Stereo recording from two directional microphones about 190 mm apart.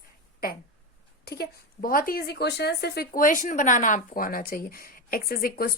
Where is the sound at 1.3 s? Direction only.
55° left (ahead or behind).